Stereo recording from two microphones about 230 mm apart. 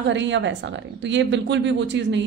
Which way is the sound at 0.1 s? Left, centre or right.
Right.